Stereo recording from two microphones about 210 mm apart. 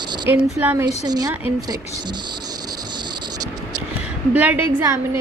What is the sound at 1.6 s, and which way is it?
Insect, 20° right (ahead or behind).